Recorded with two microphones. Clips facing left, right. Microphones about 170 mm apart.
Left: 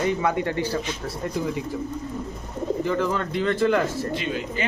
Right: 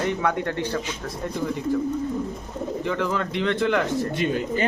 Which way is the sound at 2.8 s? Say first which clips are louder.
Even; centre (ahead or behind).